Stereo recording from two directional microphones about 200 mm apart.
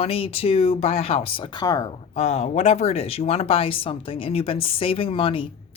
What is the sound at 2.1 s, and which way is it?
Speech, 30° left (ahead or behind).